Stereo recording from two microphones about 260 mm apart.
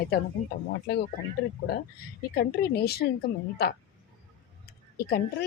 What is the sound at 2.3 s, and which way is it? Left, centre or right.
Speech, left.